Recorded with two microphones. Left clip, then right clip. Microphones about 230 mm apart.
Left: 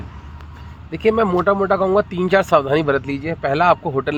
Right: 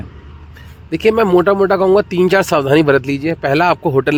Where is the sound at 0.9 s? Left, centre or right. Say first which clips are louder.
Right 5 dB; right.